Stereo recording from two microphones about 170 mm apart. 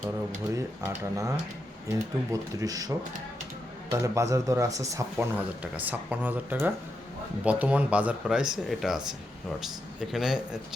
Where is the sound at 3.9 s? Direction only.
20° right (ahead or behind); by 9.1 s centre (ahead or behind).